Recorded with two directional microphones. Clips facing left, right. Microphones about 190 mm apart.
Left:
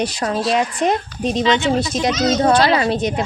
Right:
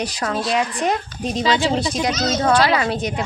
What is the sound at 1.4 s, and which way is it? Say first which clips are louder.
Speech: left 1 dB; 35° right (ahead or behind).